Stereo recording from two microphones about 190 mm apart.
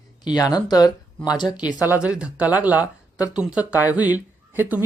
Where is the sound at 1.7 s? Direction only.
5° right (ahead or behind).